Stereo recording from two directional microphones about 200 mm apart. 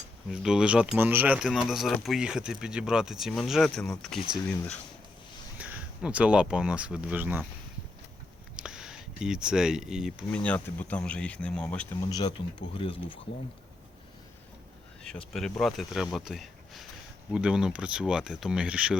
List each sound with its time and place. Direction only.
0.3 s speech: 5° right (ahead or behind)
5.5 s speech: 5° right (ahead or behind)
8.5 s speech: 5° right (ahead or behind)
12.0 s speech: 20° left (ahead or behind)
15.0 s speech: centre (ahead or behind)